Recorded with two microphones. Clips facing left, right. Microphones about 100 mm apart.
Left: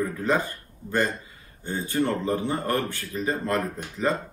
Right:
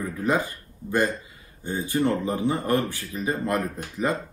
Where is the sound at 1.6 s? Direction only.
15° right (ahead or behind).